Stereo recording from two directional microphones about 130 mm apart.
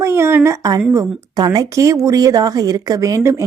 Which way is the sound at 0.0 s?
20° right (ahead or behind).